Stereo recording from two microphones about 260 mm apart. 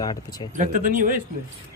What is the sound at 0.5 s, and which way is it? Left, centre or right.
Speech, right.